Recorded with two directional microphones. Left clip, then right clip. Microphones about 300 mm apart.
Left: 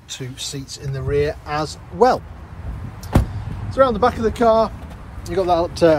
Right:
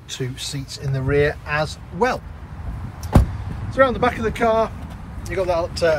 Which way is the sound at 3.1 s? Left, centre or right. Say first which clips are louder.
Right 1 dB; centre.